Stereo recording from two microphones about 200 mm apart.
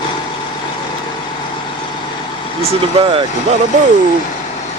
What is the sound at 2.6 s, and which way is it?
Speech, 30° right (ahead or behind).